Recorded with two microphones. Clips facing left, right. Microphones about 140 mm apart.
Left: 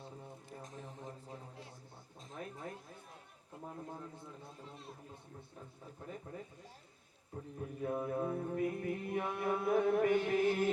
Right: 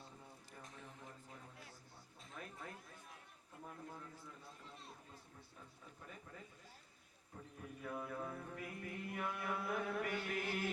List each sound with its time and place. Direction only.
0.5 s music: 40° left (ahead or behind)
2.4 s a sound: 30° left (ahead or behind)
6.1 s speech: 35° left (ahead or behind)
7.6 s mantra: 35° left (ahead or behind)
8.8 s chant: 35° left (ahead or behind)